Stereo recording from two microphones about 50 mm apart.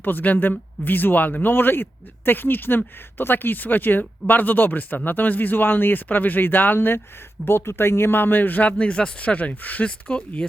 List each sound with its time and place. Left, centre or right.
0.0 s speech: left
10.1 s speech: left